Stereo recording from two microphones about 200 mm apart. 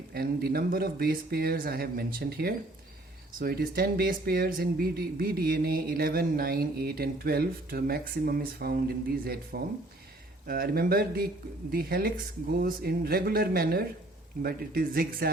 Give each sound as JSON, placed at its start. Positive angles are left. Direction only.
{"t": 0.1, "sound": "speech", "side_deg": -50}